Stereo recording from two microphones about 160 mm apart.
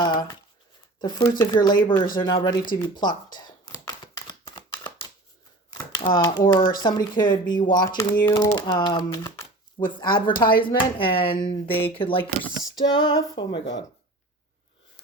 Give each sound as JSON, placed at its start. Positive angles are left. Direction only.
{"t": 0.0, "sound": "a sound", "side_deg": 25}
{"t": 1.0, "sound": "speech", "side_deg": 25}
{"t": 3.3, "sound": "a sound", "side_deg": 25}
{"t": 6.0, "sound": "speech", "side_deg": 30}
{"t": 12.3, "sound": "speech", "side_deg": 0}
{"t": 12.7, "sound": "speech", "side_deg": 30}